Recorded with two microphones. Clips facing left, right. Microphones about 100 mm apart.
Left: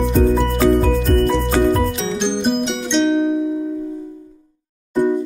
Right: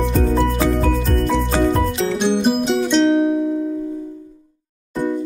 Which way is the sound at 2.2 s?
5° right (ahead or behind).